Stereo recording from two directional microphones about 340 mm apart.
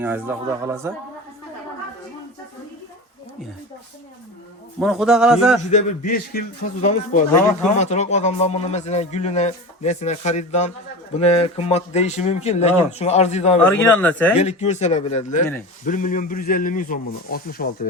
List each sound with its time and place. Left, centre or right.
0.0 s speech: centre
4.8 s a man's voice: centre
5.7 s a man's voice: left
13.7 s a man's voice: centre
14.3 s a man's voice: centre